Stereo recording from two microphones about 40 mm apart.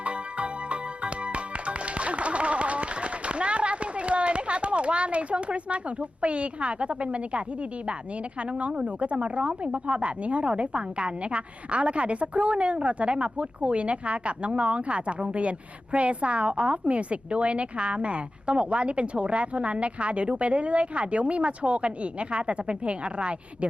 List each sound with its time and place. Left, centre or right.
0.0 s music: right
8.4 s a woman's voice: right